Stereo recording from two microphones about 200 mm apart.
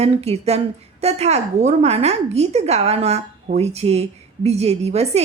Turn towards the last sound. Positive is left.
turn(degrees=-30)  # may be behind; listen again after turning